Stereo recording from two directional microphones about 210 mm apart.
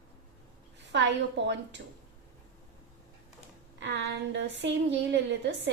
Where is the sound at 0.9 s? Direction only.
55° right (ahead or behind).